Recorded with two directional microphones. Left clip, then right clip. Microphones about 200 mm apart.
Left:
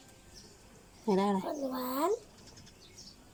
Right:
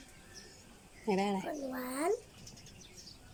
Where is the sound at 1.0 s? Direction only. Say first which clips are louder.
Left 3 dB; 5° right (ahead or behind).